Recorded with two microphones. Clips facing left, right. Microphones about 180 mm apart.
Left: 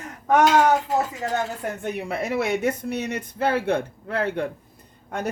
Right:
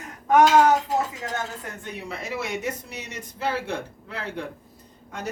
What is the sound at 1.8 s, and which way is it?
Speech, 60° left (ahead or behind).